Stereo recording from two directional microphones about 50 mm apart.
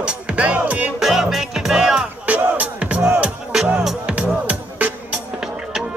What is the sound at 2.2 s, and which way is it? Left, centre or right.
Music, right.